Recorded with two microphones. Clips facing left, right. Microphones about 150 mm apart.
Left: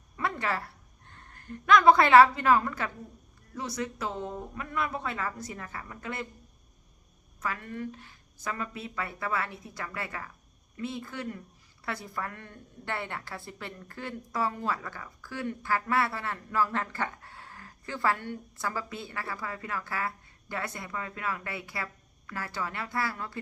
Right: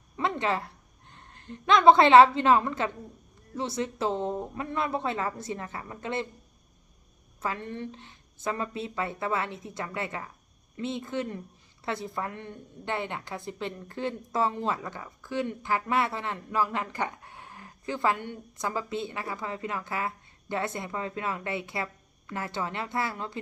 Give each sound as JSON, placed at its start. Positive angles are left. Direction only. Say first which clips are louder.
{"t": 0.2, "sound": "a woman's voice", "louder": "right 3 dB", "side_deg": -20}
{"t": 7.4, "sound": "a woman's voice", "louder": "right 2 dB", "side_deg": -25}